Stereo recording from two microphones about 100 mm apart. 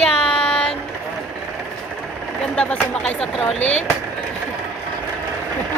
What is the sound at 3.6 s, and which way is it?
Speech, 90° left.